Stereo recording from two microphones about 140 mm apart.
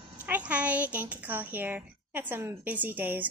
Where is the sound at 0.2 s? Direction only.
10° right (ahead or behind).